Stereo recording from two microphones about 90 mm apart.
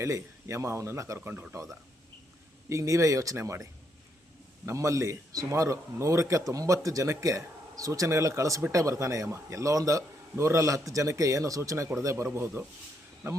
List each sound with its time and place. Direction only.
0.0 s a man's voice: 30° right (ahead or behind)
1.3 s speech: 25° right (ahead or behind)
2.6 s a man's voice: 35° right (ahead or behind)